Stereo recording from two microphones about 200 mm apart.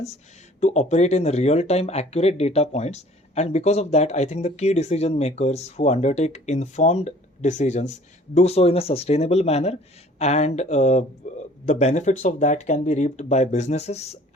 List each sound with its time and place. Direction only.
0.6 s speech: 35° left (ahead or behind)